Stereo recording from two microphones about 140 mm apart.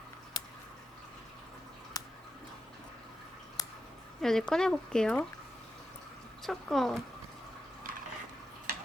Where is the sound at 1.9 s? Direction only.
30° left (ahead or behind).